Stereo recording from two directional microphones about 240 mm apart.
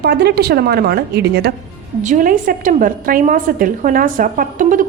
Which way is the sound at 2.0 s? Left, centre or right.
Right.